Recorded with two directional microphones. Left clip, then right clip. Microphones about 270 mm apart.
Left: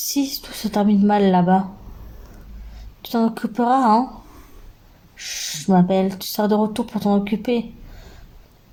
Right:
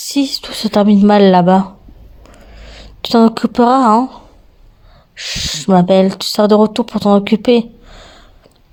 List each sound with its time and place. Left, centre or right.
0.0 s speech: right
3.0 s speech: right
5.1 s speech: right